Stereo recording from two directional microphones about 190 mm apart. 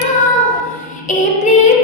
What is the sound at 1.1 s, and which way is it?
Female singing, 40° left (ahead or behind).